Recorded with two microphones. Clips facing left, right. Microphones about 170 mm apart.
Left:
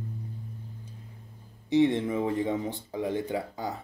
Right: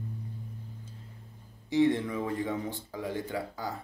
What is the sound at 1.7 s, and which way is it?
Speech, 20° left (ahead or behind).